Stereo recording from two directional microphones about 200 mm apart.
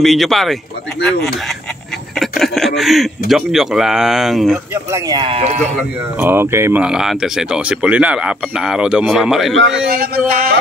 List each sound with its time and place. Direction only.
0.0 s speech: centre (ahead or behind)
2.1 s speech: centre (ahead or behind)
4.9 s speech: 20° right (ahead or behind)
6.1 s speech: 10° right (ahead or behind)
9.8 s a sound: 50° right (ahead or behind)